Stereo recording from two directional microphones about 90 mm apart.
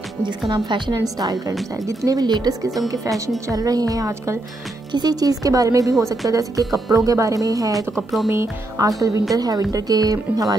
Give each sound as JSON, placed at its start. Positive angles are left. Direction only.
{"t": 0.5, "sound": "a woman's voice", "side_deg": -55}
{"t": 2.0, "sound": "speech", "side_deg": -50}